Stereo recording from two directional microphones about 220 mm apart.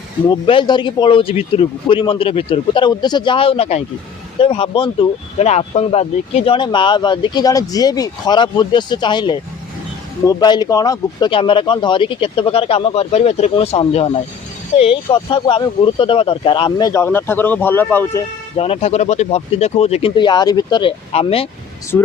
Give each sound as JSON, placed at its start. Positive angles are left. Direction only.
{"t": 0.3, "sound": "speech", "side_deg": 20}
{"t": 18.5, "sound": "speech", "side_deg": 25}
{"t": 21.9, "sound": "speech", "side_deg": 10}